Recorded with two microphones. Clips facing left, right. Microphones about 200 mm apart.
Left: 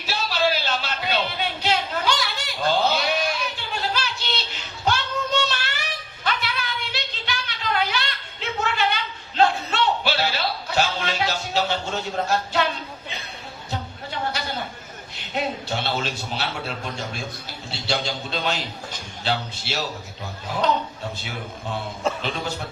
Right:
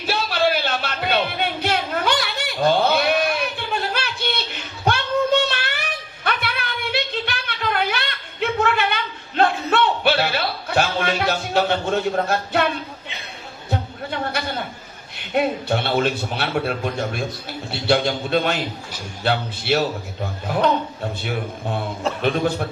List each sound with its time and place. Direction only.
0.0 s music: 55° right (ahead or behind)
6.2 s a sound: 55° right (ahead or behind)
15.3 s a man's voice: 55° right (ahead or behind)